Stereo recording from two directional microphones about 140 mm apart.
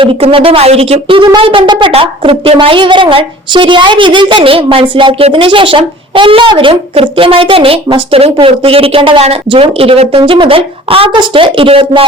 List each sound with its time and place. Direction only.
0.0 s speech: 40° right (ahead or behind)